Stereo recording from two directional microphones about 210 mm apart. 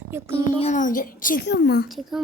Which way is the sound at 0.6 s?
35° left (ahead or behind).